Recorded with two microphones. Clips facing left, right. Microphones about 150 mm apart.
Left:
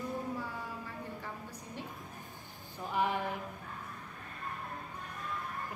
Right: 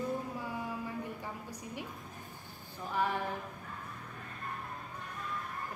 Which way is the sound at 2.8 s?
15° left (ahead or behind).